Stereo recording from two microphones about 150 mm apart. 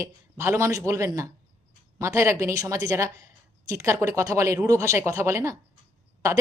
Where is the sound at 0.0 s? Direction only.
20° right (ahead or behind).